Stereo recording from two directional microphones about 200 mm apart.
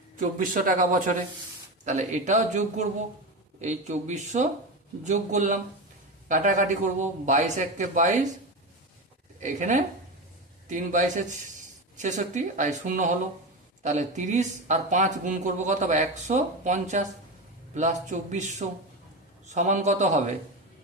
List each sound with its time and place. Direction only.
0.2 s speech: 40° right (ahead or behind)
9.4 s speech: 40° right (ahead or behind)